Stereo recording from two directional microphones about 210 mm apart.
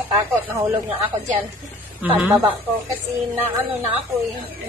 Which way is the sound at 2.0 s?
10° right (ahead or behind).